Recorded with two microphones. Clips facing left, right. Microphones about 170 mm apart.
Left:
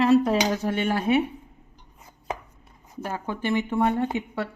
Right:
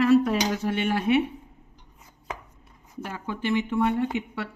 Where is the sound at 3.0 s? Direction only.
45° left (ahead or behind).